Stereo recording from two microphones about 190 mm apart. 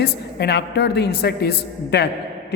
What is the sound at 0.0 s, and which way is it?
A woman's voice, 60° left (ahead or behind).